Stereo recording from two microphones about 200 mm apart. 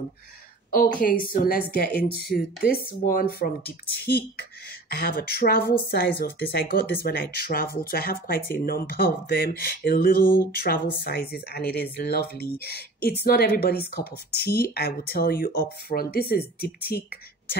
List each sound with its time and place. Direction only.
0.9 s speech: 45° left (ahead or behind)
3.1 s speech: 45° left (ahead or behind)